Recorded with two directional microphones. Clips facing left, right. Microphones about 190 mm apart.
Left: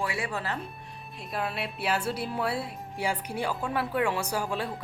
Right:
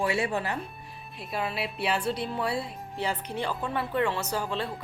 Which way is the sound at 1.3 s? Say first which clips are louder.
Right 1 dB; centre (ahead or behind).